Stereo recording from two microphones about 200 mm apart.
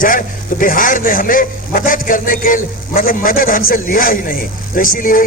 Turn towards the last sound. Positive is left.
turn(degrees=45)  # may be behind; listen again after turning